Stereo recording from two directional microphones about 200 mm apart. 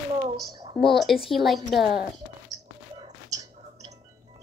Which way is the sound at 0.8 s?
Centre (ahead or behind).